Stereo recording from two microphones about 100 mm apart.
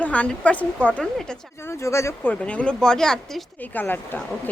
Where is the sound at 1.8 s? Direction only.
30° left (ahead or behind).